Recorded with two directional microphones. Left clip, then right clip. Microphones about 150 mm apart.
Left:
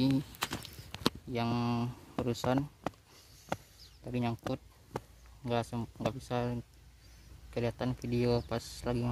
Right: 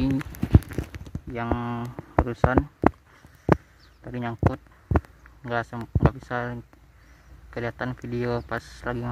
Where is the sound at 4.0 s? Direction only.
30° left (ahead or behind).